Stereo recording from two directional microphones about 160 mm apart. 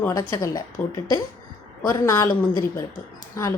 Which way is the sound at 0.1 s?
20° left (ahead or behind).